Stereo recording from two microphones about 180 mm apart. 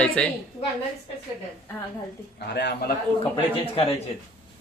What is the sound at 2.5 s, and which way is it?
Speech, 70° left (ahead or behind).